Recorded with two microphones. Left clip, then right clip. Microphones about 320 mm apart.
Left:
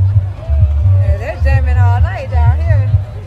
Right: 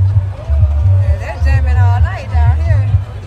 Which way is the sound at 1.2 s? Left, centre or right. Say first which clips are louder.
Left 4 dB; left.